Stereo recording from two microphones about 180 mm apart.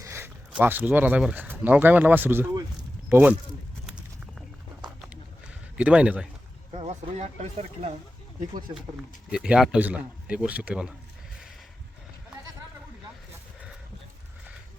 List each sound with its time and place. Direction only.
0.0 s a sound: 15° right (ahead or behind)
0.5 s speech: 10° right (ahead or behind)
3.8 s a sound: centre (ahead or behind)
5.7 s speech: 5° right (ahead or behind)
6.7 s speech: 35° right (ahead or behind)
9.3 s speech: 5° right (ahead or behind)